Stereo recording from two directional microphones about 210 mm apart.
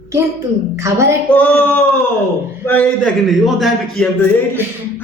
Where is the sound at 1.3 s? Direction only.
5° left (ahead or behind).